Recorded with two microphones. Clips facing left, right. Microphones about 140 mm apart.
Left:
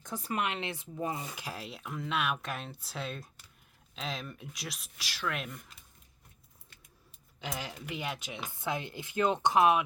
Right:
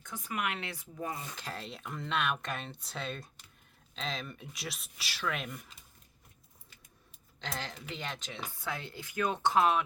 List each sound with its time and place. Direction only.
0.0 s speech: 35° left (ahead or behind)
1.3 s speech: 10° left (ahead or behind)
7.4 s speech: 10° left (ahead or behind)